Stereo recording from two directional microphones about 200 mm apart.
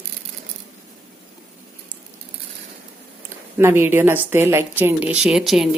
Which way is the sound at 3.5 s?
10° right (ahead or behind).